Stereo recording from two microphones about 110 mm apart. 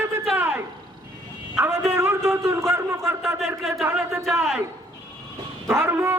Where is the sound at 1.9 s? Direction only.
25° right (ahead or behind).